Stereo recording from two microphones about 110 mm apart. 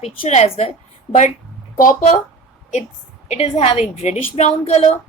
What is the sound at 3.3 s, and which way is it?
Speech, 75° left (ahead or behind).